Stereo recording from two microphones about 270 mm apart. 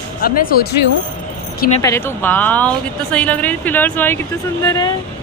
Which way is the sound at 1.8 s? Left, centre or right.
Centre.